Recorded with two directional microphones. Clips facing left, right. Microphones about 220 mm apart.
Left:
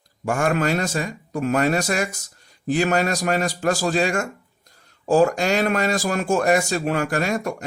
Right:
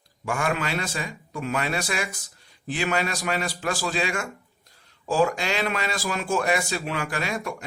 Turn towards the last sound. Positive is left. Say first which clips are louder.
# left 6 dB
turn(degrees=45)  # may be behind; listen again after turning